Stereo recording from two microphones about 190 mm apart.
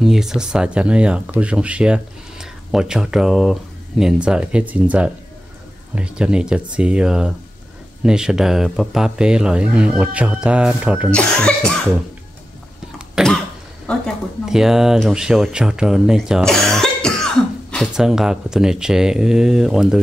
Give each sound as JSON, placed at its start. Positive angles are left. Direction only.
{"t": 0.0, "sound": "speech", "side_deg": 0}
{"t": 11.1, "sound": "speech", "side_deg": 5}
{"t": 13.1, "sound": "cough", "side_deg": 0}
{"t": 13.8, "sound": "speech", "side_deg": 0}